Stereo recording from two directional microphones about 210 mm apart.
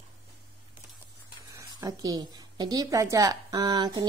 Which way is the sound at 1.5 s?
15° right (ahead or behind).